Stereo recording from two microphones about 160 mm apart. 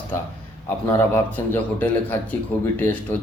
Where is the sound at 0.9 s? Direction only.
15° left (ahead or behind).